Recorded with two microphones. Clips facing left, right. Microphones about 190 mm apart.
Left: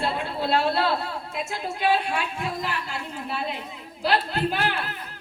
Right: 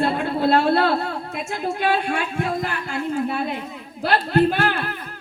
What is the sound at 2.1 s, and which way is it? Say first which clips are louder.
A woman's voice: right 5 dB; 55° right (ahead or behind).